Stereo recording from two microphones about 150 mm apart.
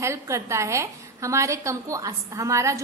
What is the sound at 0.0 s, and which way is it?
A woman's voice, 20° right (ahead or behind).